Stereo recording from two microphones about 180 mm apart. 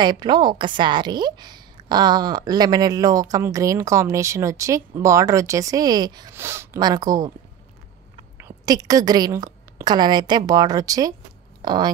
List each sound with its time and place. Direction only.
0.0 s a woman's voice: 25° right (ahead or behind)
8.4 s a woman's voice: 15° right (ahead or behind)